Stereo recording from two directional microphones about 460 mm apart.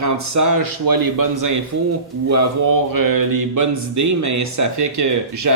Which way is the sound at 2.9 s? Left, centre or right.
Right.